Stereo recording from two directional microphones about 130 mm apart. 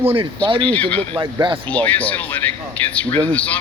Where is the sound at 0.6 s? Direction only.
10° left (ahead or behind).